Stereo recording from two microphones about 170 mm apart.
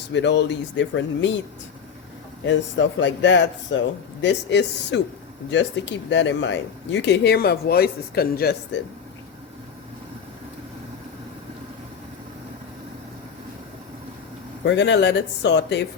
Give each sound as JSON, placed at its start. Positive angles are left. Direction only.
{"t": 0.1, "sound": "speech", "side_deg": 90}
{"t": 2.5, "sound": "speech", "side_deg": 90}
{"t": 14.6, "sound": "speech", "side_deg": 90}